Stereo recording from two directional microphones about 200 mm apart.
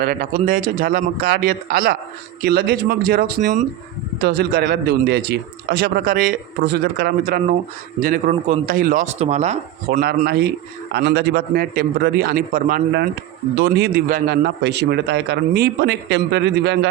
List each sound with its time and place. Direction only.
0.0 s a man's voice: 45° right (ahead or behind)
8.3 s speech: 30° right (ahead or behind)
8.6 s speech: 45° right (ahead or behind)
10.2 s a man's voice: 55° right (ahead or behind)